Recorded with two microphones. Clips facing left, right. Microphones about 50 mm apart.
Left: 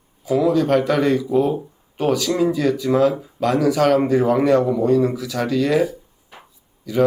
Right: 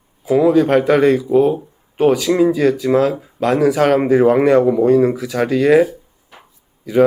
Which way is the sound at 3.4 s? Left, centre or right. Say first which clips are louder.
Right 3 dB; right.